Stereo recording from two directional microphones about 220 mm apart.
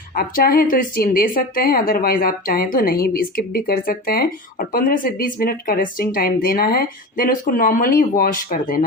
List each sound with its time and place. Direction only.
0.1 s a woman's voice: 40° left (ahead or behind)